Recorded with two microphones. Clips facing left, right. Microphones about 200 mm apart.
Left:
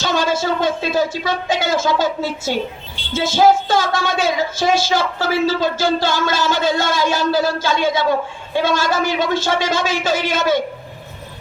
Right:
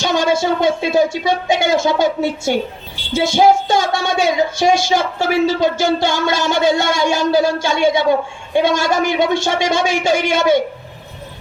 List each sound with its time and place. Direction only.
0.0 s speech: 15° right (ahead or behind)